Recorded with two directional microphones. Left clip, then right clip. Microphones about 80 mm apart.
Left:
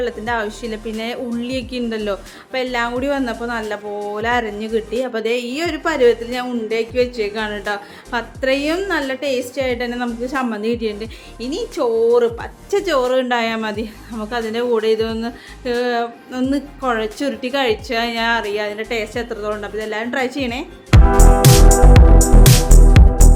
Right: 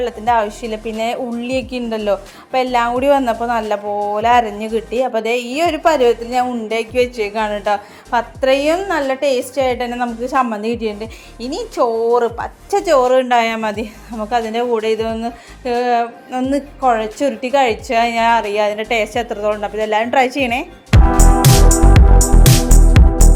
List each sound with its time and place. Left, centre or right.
0.0 s music: right
1.9 s a woman's voice: right
5.0 s music: right
6.7 s speech: right
7.5 s music: right
8.4 s a woman's voice: right
11.3 s a woman's voice: right
14.2 s music: right
14.6 s speech: centre
14.8 s music: right
16.8 s a woman's voice: centre; by 20.7 s right
20.9 s music: centre